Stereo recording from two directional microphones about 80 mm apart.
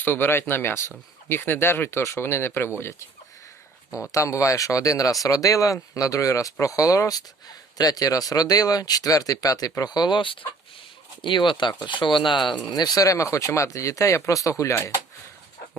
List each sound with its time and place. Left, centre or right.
0.0 s speech: left
9.8 s speech: left
11.9 s speech: left
12.7 s speech: left